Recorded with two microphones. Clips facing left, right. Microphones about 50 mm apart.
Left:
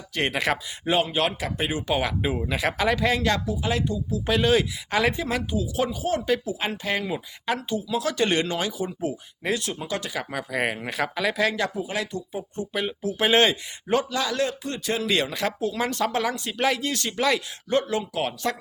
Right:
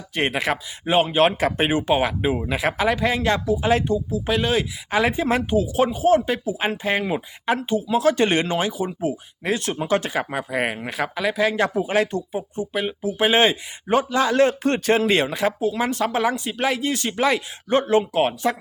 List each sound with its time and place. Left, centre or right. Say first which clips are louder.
0.1 s speech: right 3 dB; centre
0.9 s speech: right 5 dB; right
1.4 s speech: right 7 dB; right
1.9 s speech: right 5 dB; centre
3.5 s speech: right 7 dB; right
4.1 s speech: left 3 dB; centre
5.1 s speech: right 6 dB; right; by 9.6 s centre
9.8 s speech: right 8 dB; right
10.2 s speech: right 3 dB; centre
11.5 s speech: right 7 dB; right
12.3 s speech: right 4 dB; centre; by 14.5 s right
14.6 s speech: right 9 dB; right
15.3 s speech: right 5 dB; centre
16.9 s speech: right 3 dB; right